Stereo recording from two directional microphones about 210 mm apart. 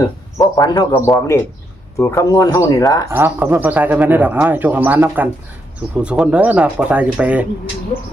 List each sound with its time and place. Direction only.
0.3 s speech: 15° left (ahead or behind)
3.1 s speech: 10° right (ahead or behind)